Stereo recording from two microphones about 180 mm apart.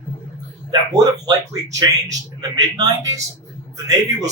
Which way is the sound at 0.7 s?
20° right (ahead or behind).